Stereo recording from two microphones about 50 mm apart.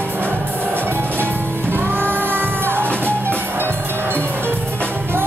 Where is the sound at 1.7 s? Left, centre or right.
Right.